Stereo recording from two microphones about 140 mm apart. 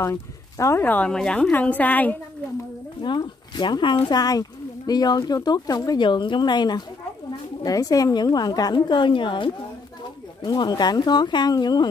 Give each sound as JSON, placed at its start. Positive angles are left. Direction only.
{"t": 0.0, "sound": "speech", "side_deg": 20}
{"t": 3.0, "sound": "a woman's voice", "side_deg": 30}